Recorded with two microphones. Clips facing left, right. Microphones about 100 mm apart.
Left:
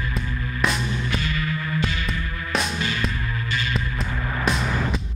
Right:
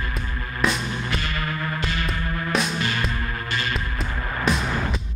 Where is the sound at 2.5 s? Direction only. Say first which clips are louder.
Even; centre (ahead or behind).